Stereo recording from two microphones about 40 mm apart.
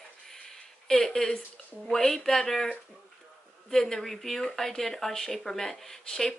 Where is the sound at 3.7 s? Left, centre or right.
Centre.